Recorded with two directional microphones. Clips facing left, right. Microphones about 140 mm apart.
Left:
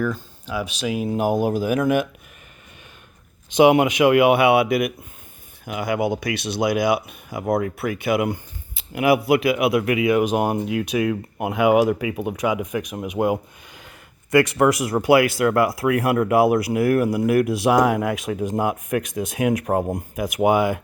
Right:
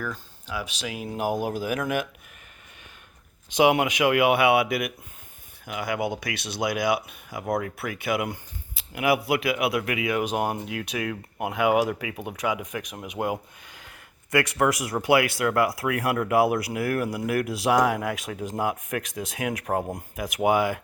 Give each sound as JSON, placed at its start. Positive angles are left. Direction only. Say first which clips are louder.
{"t": 0.4, "sound": "speech", "louder": "left 7 dB", "side_deg": 15}
{"t": 3.5, "sound": "speech", "louder": "left 6 dB", "side_deg": 25}
{"t": 14.9, "sound": "speech", "louder": "left 5 dB", "side_deg": 35}